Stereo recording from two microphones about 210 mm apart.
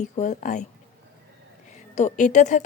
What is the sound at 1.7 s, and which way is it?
Speech, 35° left (ahead or behind).